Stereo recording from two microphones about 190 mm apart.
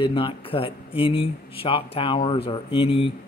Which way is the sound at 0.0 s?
30° left (ahead or behind).